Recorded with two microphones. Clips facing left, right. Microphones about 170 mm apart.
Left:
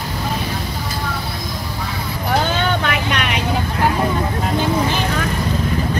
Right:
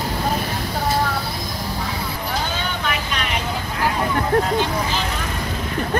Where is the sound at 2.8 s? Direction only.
65° left (ahead or behind).